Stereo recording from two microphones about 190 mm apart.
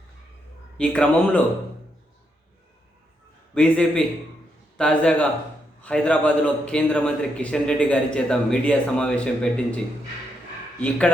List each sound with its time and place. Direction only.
0.8 s speech: 5° left (ahead or behind)
3.5 s a man's voice: 5° left (ahead or behind)